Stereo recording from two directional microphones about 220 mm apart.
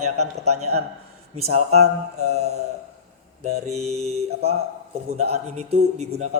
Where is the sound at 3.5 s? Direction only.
30° right (ahead or behind).